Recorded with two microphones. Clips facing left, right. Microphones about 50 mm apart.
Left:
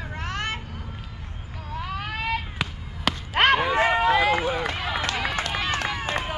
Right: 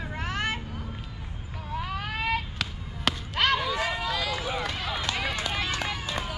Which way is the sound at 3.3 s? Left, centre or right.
Left.